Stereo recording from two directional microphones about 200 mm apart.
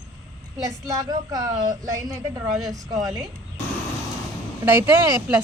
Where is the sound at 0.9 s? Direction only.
20° right (ahead or behind).